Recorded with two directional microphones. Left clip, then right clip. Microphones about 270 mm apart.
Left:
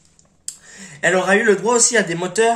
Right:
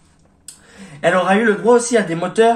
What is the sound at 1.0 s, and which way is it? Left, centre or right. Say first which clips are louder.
Speech: right 1 dB; left.